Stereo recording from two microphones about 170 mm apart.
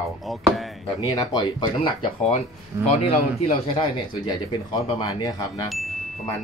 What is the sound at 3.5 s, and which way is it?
Speech, 30° left (ahead or behind).